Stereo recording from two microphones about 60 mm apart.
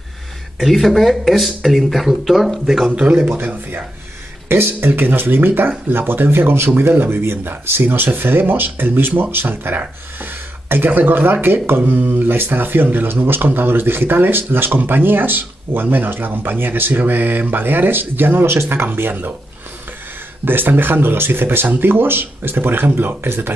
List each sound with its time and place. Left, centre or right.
0.6 s speech: centre
2.9 s speech: right
20.4 s speech: right